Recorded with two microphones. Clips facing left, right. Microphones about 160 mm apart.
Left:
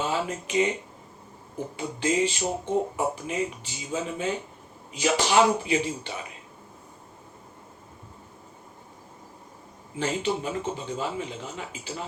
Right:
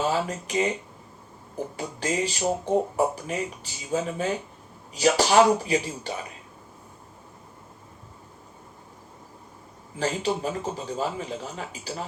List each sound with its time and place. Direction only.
0.1 s speech: 40° right (ahead or behind)
1.7 s speech: 40° right (ahead or behind)
10.0 s speech: 40° right (ahead or behind)